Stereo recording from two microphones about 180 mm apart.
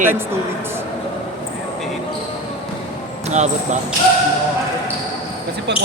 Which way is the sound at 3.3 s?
40° right (ahead or behind).